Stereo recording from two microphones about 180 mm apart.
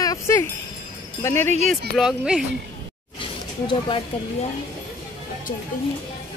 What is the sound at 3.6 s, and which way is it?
Speech, 30° left (ahead or behind).